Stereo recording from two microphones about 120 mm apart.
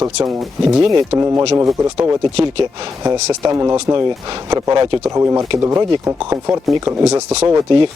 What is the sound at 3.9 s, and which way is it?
Speech, 40° right (ahead or behind).